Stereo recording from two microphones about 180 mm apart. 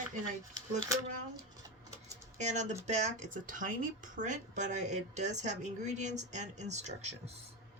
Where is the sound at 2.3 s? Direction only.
40° right (ahead or behind).